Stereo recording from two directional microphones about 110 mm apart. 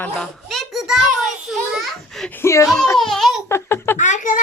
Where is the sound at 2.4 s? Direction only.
25° left (ahead or behind).